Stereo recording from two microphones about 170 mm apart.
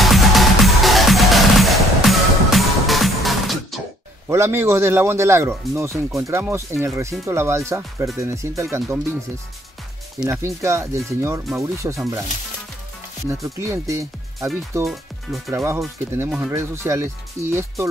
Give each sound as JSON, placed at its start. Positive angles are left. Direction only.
{"t": 0.0, "sound": "music", "side_deg": 0}
{"t": 4.3, "sound": "speech", "side_deg": -15}
{"t": 10.3, "sound": "speech", "side_deg": -15}
{"t": 13.3, "sound": "speech", "side_deg": -15}
{"t": 14.9, "sound": "speech", "side_deg": 0}
{"t": 15.5, "sound": "speech", "side_deg": -15}